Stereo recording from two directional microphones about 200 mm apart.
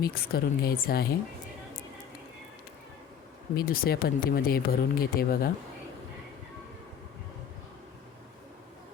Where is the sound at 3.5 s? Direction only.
45° left (ahead or behind).